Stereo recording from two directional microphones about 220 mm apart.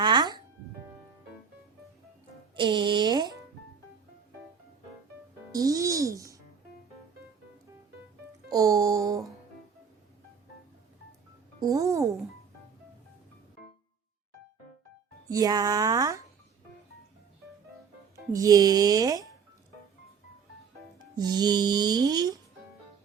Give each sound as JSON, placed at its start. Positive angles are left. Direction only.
{"t": 0.0, "sound": "music", "side_deg": -20}
{"t": 2.6, "sound": "music", "side_deg": -20}
{"t": 5.5, "sound": "music", "side_deg": -15}
{"t": 8.4, "sound": "music", "side_deg": -15}
{"t": 11.6, "sound": "music", "side_deg": -15}
{"t": 15.3, "sound": "a woman's voice", "side_deg": -15}
{"t": 18.3, "sound": "speech", "side_deg": -15}
{"t": 21.3, "sound": "music", "side_deg": -20}